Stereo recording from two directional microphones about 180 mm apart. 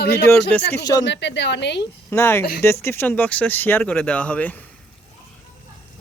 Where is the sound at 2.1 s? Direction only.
15° left (ahead or behind).